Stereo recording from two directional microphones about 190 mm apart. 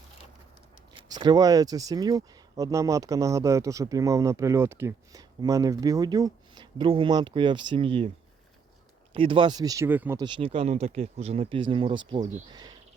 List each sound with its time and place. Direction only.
0.9 s speech: 20° right (ahead or behind)
9.1 s speech: 25° right (ahead or behind); by 10.2 s 10° right (ahead or behind)
10.2 s speech: 25° right (ahead or behind)